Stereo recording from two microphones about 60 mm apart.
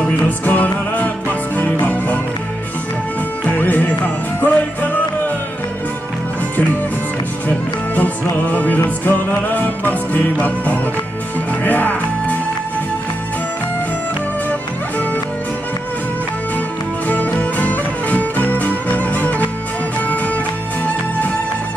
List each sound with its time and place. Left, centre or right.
0.0 s music: left
3.5 s music: left
7.4 s music: left
17.1 s music: left